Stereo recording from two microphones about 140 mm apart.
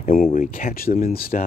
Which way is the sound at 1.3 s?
70° left (ahead or behind).